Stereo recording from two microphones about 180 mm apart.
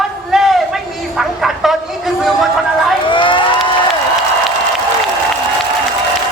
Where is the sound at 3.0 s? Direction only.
25° left (ahead or behind).